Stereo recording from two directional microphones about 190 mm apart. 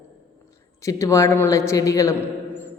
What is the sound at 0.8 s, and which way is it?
A man's voice, 15° left (ahead or behind).